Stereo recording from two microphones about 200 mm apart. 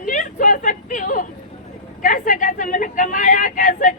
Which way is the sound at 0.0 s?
40° left (ahead or behind).